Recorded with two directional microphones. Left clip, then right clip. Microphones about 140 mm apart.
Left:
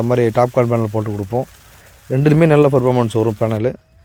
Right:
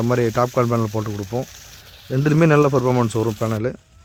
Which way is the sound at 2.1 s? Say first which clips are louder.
Left 5 dB; 15° left (ahead or behind).